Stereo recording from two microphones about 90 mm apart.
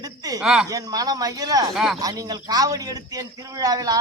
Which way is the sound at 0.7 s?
45° right (ahead or behind).